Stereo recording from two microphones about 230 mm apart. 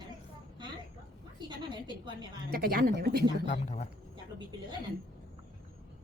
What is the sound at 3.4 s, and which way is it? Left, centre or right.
Speech, left.